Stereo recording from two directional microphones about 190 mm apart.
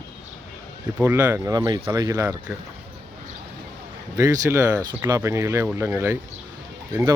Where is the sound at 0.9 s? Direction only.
10° right (ahead or behind).